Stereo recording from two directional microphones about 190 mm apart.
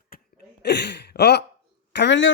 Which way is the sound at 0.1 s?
60° left (ahead or behind).